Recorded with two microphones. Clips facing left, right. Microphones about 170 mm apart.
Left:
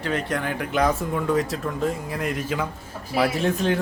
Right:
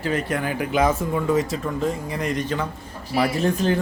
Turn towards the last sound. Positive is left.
turn(degrees=0)  # may be behind; listen again after turning